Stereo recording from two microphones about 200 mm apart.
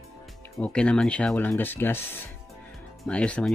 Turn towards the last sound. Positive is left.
turn(degrees=5)  # may be behind; listen again after turning